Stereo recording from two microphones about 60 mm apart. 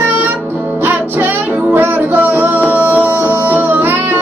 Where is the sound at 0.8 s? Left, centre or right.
Right.